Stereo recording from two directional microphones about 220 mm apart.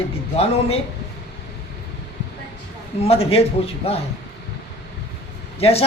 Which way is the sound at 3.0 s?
25° left (ahead or behind).